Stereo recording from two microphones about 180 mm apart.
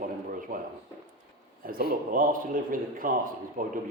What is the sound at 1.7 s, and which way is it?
Speech, 55° right (ahead or behind).